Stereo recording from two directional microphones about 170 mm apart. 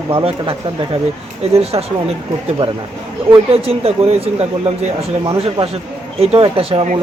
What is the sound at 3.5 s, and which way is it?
Speech, 35° right (ahead or behind).